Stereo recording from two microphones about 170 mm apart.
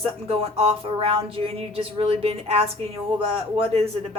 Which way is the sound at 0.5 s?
35° right (ahead or behind).